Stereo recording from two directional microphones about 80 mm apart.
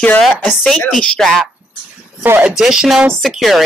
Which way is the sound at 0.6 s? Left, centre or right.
Centre.